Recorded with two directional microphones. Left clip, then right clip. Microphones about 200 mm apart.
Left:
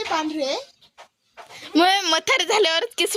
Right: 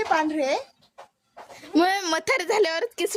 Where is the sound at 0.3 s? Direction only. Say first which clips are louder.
Right 1 dB; 10° right (ahead or behind).